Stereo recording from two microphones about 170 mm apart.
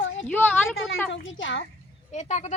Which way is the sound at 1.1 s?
90° left.